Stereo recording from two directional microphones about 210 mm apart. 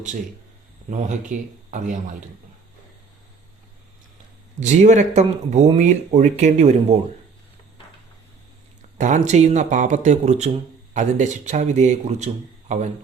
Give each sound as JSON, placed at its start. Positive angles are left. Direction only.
{"t": 0.9, "sound": "speech", "side_deg": -35}
{"t": 4.6, "sound": "speech", "side_deg": -35}
{"t": 9.0, "sound": "speech", "side_deg": -35}